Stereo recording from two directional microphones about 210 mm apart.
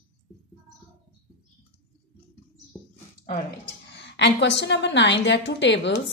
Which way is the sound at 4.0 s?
55° left (ahead or behind).